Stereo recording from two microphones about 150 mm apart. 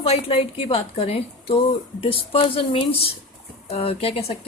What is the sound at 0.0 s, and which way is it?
A woman's voice, 40° left (ahead or behind).